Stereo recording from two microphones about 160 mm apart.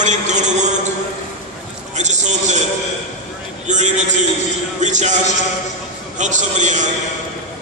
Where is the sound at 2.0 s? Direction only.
50° right (ahead or behind).